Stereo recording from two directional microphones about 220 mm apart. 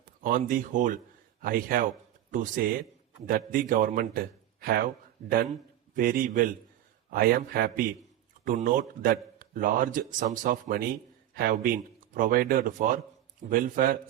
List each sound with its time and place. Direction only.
0.2 s a man's voice: 40° right (ahead or behind)
5.9 s a man's voice: 40° right (ahead or behind)